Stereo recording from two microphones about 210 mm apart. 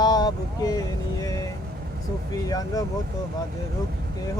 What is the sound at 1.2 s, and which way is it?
Vehicle, 15° left (ahead or behind).